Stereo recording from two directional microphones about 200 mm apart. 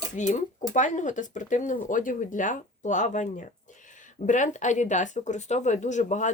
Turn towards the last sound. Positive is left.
turn(degrees=35)  # may be behind; listen again after turning